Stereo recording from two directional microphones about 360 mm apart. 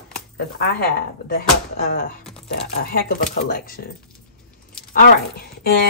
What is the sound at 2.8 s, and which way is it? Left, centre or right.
Speech, left.